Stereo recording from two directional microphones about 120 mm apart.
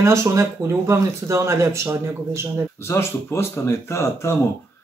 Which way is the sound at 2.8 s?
20° left (ahead or behind).